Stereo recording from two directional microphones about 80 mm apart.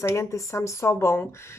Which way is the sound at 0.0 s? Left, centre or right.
Left.